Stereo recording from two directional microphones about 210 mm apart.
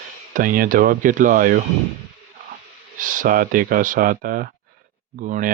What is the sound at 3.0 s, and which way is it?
Speech, 40° right (ahead or behind).